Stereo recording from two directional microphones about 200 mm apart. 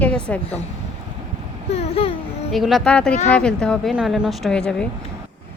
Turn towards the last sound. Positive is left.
turn(degrees=5)  # may be behind; listen again after turning